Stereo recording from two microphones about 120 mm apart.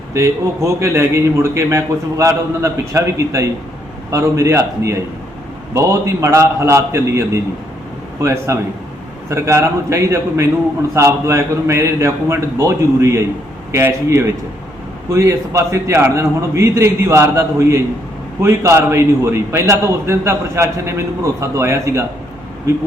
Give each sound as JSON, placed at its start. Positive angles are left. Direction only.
{"t": 0.1, "sound": "a man's voice", "side_deg": -25}